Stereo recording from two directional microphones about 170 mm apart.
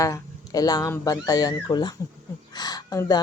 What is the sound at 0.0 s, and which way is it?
Speech, 20° left (ahead or behind).